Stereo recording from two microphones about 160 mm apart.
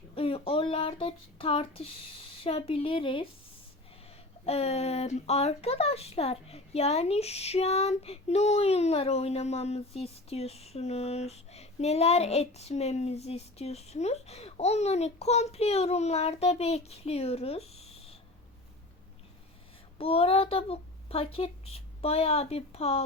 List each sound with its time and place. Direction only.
0.2 s speech: 35° left (ahead or behind)
4.4 s speech: 40° left (ahead or behind)
20.0 s speech: 35° left (ahead or behind)